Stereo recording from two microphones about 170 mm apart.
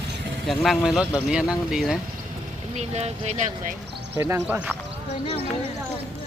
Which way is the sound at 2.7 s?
40° right (ahead or behind).